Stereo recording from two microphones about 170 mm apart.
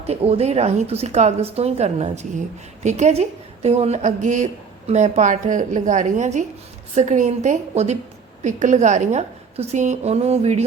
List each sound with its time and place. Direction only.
0.0 s a woman's voice: 35° right (ahead or behind)